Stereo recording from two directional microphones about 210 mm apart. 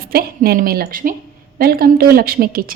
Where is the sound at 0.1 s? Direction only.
45° right (ahead or behind).